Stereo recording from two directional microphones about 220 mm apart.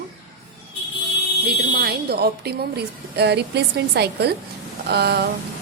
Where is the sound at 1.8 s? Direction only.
45° right (ahead or behind).